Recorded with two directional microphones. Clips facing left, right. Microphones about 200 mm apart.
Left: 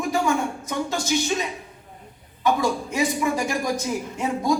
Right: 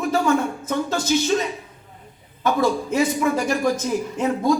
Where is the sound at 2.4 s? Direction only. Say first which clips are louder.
Right 2 dB; 15° left (ahead or behind).